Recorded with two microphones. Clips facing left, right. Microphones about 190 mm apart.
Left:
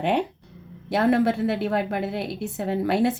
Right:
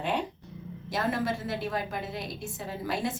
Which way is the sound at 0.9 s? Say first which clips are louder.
Left 9 dB; 65° left (ahead or behind).